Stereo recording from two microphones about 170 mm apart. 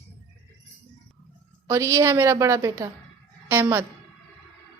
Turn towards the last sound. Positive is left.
turn(degrees=-15)  # may be behind; listen again after turning